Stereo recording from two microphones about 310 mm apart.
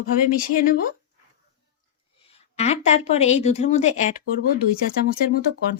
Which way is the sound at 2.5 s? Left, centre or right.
Left.